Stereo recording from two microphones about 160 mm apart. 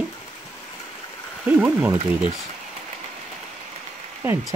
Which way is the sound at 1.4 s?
10° right (ahead or behind).